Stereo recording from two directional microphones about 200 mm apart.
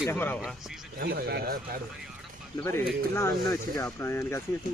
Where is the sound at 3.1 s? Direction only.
15° left (ahead or behind).